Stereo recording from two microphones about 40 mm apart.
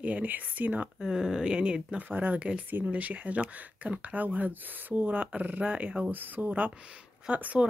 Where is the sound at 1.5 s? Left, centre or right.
Right.